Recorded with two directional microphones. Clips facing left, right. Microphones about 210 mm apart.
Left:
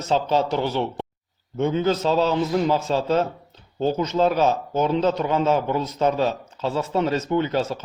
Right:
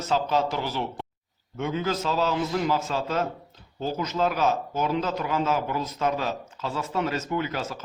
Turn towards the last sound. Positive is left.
turn(degrees=30)  # may be behind; listen again after turning